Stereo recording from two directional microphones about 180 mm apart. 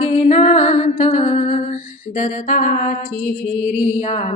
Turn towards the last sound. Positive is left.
turn(degrees=35)  # may be behind; listen again after turning